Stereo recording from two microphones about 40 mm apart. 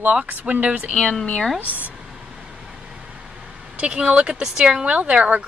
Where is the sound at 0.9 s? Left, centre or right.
Centre.